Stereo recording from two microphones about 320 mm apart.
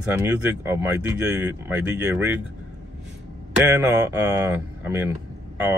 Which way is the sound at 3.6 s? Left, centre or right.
Centre.